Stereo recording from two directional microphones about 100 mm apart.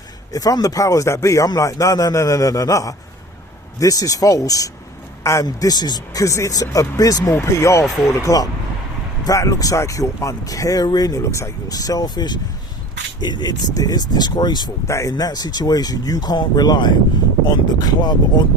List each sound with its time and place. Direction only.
0.3 s speech: 35° left (ahead or behind)
14.8 s speech: 30° left (ahead or behind)
15.1 s speech: 40° left (ahead or behind)